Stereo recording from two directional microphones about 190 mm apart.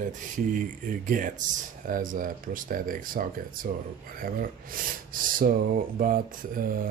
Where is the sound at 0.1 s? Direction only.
45° right (ahead or behind).